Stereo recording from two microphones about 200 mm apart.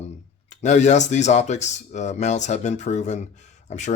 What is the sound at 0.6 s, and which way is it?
Speech, 35° left (ahead or behind).